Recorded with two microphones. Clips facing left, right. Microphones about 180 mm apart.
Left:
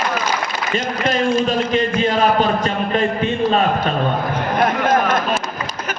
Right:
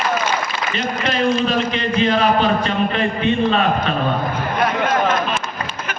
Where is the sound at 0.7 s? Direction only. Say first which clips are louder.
Left 2 dB; 45° left (ahead or behind).